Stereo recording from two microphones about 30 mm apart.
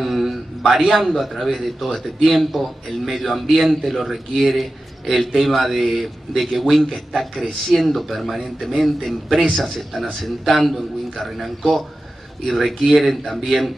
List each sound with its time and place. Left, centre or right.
0.0 s a sound: centre
0.8 s a man's voice: centre
7.7 s a man's voice: centre